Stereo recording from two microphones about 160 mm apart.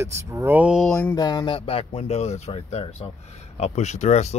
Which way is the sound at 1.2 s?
25° left (ahead or behind).